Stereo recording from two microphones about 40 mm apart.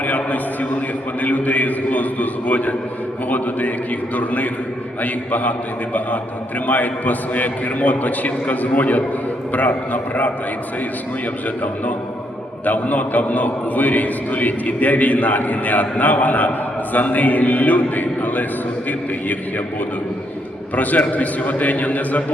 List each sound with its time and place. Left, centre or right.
0.0 s a man's voice: left
12.6 s a man's voice: left
20.7 s a man's voice: left